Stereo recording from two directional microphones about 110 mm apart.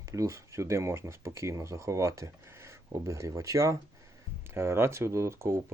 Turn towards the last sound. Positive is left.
turn(degrees=-25)  # may be behind; listen again after turning